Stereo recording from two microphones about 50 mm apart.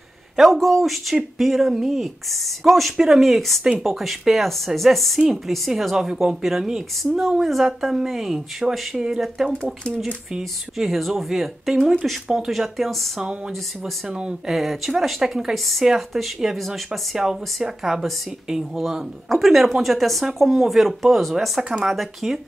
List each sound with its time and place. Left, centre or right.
0.4 s speech: centre
10.3 s speech: centre
14.5 s speech: centre